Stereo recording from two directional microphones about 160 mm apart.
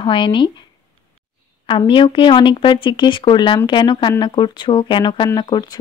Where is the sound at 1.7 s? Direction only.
30° left (ahead or behind).